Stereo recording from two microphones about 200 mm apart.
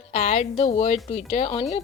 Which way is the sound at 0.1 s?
35° left (ahead or behind).